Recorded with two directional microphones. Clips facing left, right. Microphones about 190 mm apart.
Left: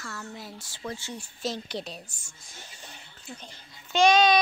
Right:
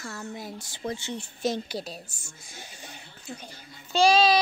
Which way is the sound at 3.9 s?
30° right (ahead or behind).